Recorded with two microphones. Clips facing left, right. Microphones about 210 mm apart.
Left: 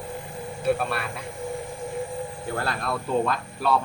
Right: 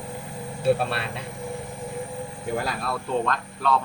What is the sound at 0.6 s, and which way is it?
Speech, 30° right (ahead or behind).